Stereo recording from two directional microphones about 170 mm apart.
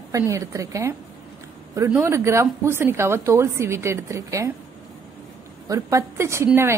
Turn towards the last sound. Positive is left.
turn(degrees=-15)  # may be behind; listen again after turning